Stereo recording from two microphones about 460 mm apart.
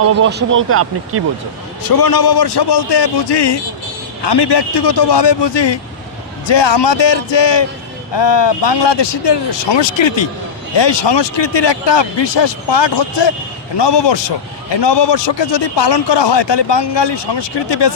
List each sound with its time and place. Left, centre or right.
0.2 s speech: right
1.8 s a man's voice: left